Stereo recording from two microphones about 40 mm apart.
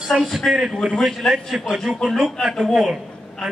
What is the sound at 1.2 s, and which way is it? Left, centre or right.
Speech, centre.